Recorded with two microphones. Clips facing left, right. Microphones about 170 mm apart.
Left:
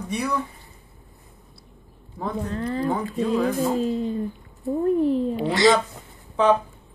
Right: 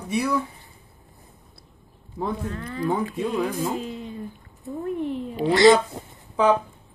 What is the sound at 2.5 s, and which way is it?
Speech, 35° left (ahead or behind).